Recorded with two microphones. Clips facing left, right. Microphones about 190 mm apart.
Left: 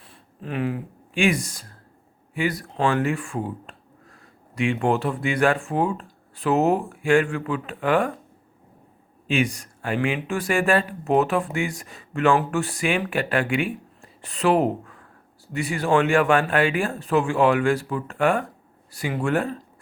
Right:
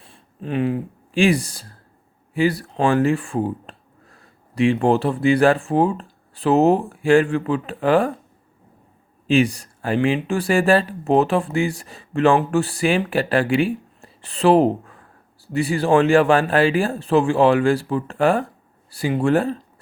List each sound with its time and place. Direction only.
0.0 s speech: 25° right (ahead or behind)
9.2 s speech: 35° right (ahead or behind)